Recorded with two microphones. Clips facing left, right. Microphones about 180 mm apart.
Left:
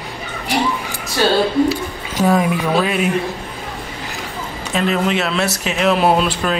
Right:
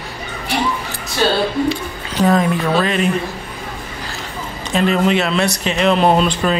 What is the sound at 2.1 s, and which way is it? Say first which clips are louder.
Speech: right 1 dB; 10° left (ahead or behind).